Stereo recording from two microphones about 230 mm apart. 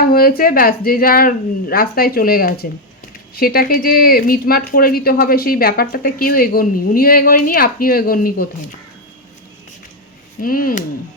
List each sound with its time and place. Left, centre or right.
0.1 s speech: left
10.4 s speech: left